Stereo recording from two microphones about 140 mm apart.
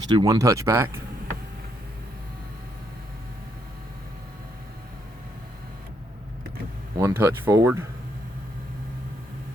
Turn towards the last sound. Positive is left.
turn(degrees=-20)  # may be behind; listen again after turning